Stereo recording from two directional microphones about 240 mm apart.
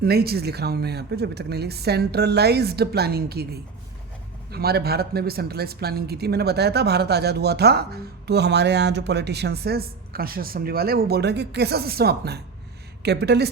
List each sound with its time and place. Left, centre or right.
0.0 s speech: right